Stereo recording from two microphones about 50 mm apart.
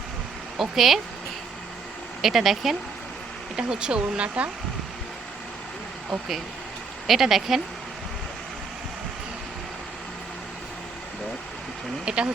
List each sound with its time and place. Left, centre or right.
0.5 s speech: centre
2.2 s speech: centre
3.5 s speech: centre
7.1 s speech: centre
12.0 s speech: right